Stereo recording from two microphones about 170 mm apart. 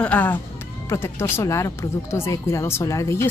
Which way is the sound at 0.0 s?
10° left (ahead or behind).